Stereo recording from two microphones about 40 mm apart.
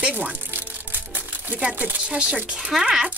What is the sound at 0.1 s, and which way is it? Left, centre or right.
Speech, right.